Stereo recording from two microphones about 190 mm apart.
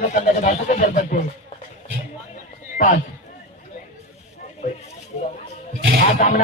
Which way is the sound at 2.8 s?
50° left (ahead or behind).